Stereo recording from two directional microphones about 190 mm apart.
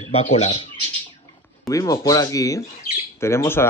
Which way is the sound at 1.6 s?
20° left (ahead or behind).